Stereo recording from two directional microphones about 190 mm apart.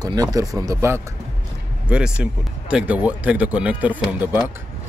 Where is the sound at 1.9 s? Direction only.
5° right (ahead or behind).